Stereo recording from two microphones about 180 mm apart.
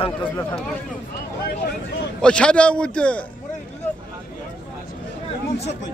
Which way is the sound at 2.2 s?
5° left (ahead or behind).